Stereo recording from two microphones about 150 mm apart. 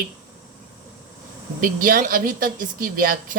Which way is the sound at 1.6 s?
65° right (ahead or behind).